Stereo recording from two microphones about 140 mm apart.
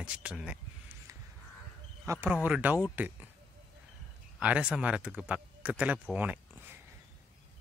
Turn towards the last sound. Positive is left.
turn(degrees=-10)  # may be behind; listen again after turning